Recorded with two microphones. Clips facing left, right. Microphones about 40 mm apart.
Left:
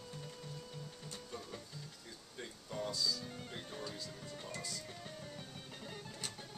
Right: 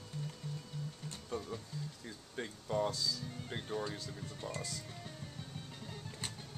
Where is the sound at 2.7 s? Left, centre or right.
Right.